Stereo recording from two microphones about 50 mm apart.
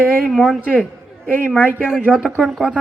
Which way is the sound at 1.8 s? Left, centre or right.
Centre.